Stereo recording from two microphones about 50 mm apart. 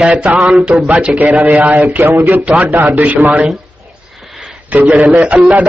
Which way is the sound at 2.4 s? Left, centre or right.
Right.